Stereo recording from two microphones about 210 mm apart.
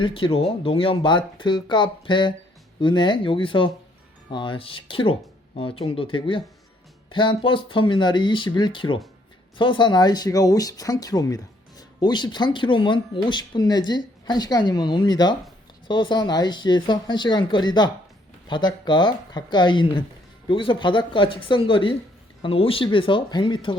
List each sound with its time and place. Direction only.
0.0 s speech: 25° left (ahead or behind)